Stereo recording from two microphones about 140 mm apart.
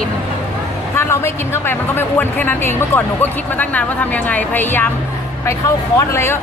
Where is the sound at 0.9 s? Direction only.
20° left (ahead or behind).